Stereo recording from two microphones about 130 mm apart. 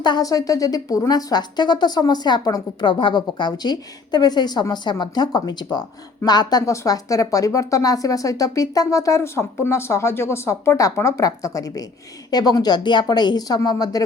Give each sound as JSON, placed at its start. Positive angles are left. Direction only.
{"t": 0.0, "sound": "speech", "side_deg": 30}